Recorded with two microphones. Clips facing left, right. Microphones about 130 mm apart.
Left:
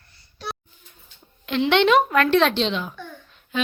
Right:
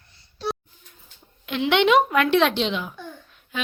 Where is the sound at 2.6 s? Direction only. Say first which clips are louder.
Left 1 dB; 10° right (ahead or behind).